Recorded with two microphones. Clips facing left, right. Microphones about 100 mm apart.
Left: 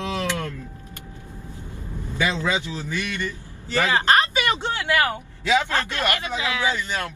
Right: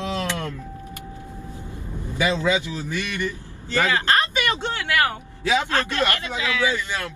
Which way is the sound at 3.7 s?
20° left (ahead or behind).